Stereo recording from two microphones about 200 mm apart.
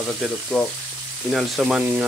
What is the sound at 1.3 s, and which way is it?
Speech, 5° right (ahead or behind).